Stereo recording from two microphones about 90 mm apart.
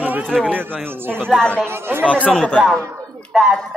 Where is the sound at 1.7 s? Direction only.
25° right (ahead or behind).